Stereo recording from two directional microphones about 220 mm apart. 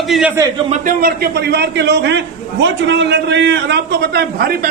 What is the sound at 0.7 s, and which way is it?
A man's voice, 40° right (ahead or behind).